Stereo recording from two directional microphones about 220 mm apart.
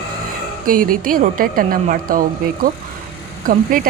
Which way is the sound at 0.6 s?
40° right (ahead or behind).